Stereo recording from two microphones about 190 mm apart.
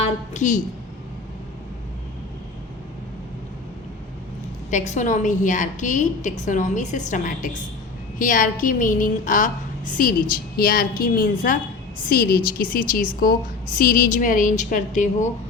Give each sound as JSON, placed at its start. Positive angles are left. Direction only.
{"t": 0.3, "sound": "a woman's voice", "side_deg": 40}
{"t": 4.7, "sound": "a woman's voice", "side_deg": 40}